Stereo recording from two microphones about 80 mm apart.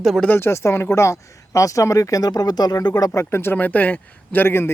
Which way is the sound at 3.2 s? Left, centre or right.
Left.